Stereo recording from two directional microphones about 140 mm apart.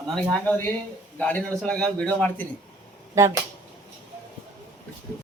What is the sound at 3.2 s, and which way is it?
Speech, 20° right (ahead or behind).